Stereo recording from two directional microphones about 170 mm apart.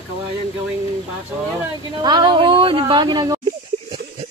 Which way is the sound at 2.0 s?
25° right (ahead or behind).